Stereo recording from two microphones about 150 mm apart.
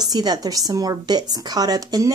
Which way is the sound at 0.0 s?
25° right (ahead or behind).